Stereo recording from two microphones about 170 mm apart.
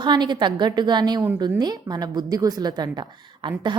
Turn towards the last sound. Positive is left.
turn(degrees=-25)  # may be behind; listen again after turning